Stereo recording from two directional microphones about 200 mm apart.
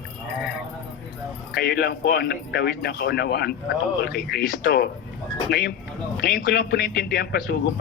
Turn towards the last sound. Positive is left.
turn(degrees=50)  # may be behind; listen again after turning